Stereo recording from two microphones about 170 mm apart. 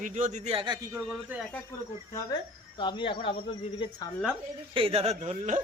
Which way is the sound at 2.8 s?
30° left (ahead or behind).